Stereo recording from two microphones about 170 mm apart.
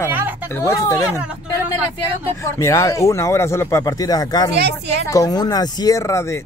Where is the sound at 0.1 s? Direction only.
10° right (ahead or behind).